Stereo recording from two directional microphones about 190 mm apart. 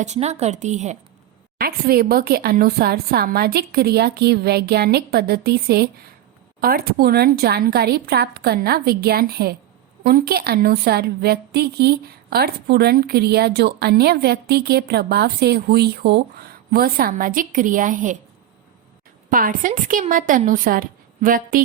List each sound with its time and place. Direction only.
0.0 s a woman's voice: 35° right (ahead or behind)
1.5 s a woman's voice: 50° right (ahead or behind)
19.3 s a woman's voice: 45° right (ahead or behind)